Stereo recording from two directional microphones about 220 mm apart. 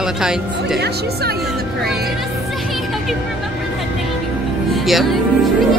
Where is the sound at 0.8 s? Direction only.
45° right (ahead or behind).